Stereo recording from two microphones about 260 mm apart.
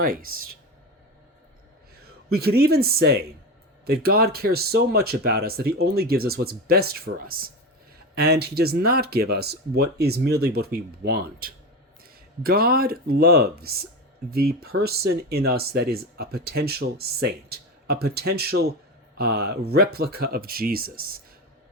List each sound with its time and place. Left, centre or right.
0.0 s speech: right
2.3 s speech: right